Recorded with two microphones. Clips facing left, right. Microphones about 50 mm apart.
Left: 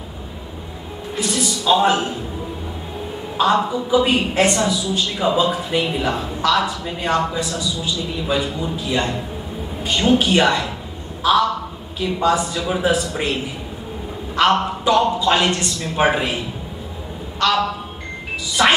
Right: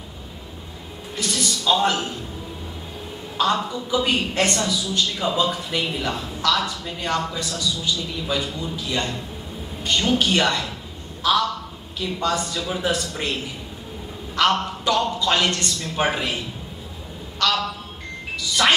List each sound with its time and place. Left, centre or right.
1.1 s a woman's voice: centre
3.3 s a woman's voice: centre